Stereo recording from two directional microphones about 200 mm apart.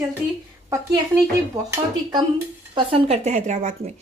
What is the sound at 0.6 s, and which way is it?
Speech, 20° right (ahead or behind).